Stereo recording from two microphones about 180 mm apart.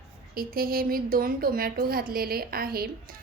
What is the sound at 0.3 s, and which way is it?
A woman's voice, 55° right (ahead or behind).